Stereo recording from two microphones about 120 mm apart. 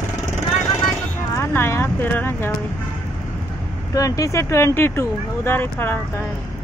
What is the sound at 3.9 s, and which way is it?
Speech, 30° left (ahead or behind).